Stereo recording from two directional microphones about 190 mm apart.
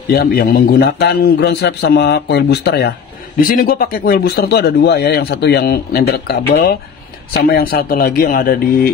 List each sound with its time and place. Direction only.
0.1 s speech: 55° left (ahead or behind)